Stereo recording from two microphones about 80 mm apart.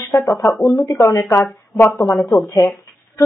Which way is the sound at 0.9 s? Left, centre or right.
Left.